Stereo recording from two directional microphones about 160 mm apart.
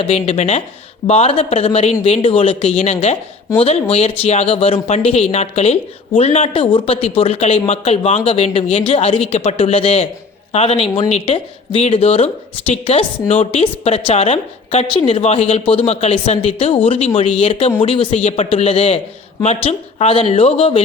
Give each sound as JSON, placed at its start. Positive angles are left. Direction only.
{"t": 0.0, "sound": "a woman's voice", "side_deg": 40}